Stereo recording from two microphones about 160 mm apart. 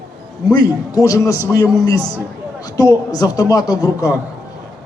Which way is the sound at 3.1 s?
25° left (ahead or behind).